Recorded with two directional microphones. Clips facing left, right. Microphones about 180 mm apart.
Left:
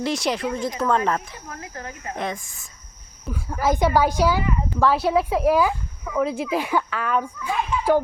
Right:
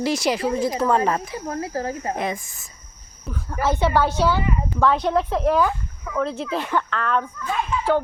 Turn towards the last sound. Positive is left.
turn(degrees=10)  # may be behind; listen again after turning